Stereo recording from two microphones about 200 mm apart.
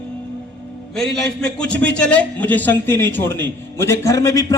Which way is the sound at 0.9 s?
5° left (ahead or behind).